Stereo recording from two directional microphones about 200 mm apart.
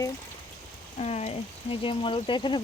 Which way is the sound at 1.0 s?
30° left (ahead or behind).